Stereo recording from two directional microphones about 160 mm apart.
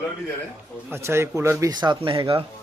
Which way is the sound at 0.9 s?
15° right (ahead or behind).